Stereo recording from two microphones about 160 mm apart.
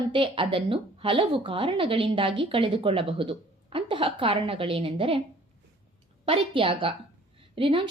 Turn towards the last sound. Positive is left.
turn(degrees=-35)  # may be behind; listen again after turning